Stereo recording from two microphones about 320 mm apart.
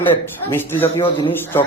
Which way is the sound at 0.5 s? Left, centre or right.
Centre.